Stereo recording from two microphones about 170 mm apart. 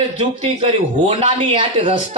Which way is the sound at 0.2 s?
35° right (ahead or behind).